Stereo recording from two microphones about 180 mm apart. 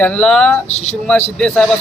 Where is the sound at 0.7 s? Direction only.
35° left (ahead or behind).